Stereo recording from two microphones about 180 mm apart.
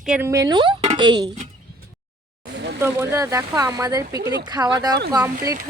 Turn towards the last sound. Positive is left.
turn(degrees=-20)  # may be behind; listen again after turning